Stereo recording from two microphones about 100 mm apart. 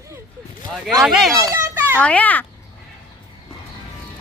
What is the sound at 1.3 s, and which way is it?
Speech, 35° right (ahead or behind).